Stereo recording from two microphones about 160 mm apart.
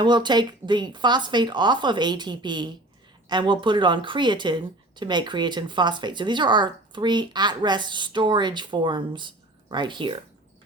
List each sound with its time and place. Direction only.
0.0 s speech: 30° right (ahead or behind)